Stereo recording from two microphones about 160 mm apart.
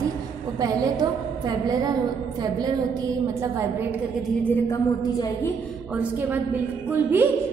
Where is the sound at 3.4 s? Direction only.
15° right (ahead or behind).